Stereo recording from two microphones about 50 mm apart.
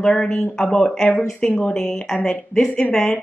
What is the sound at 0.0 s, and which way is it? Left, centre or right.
Speech, centre.